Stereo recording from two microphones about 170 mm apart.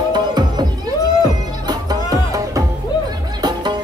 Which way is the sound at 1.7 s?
20° right (ahead or behind).